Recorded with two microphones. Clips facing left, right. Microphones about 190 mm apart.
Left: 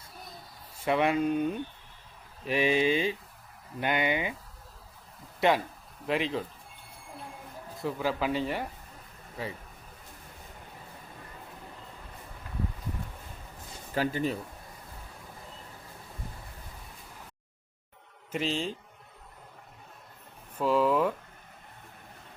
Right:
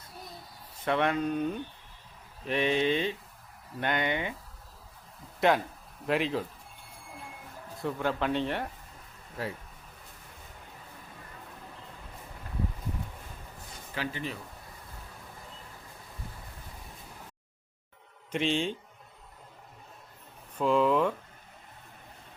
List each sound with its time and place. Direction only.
0.8 s speech: 10° left (ahead or behind)
5.4 s speech: centre (ahead or behind)
7.8 s speech: centre (ahead or behind)
13.9 s speech: 40° left (ahead or behind)
18.3 s speech: 5° left (ahead or behind)
20.6 s speech: 5° left (ahead or behind)